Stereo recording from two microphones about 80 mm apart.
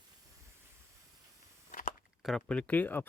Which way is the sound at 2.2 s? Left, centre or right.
Centre.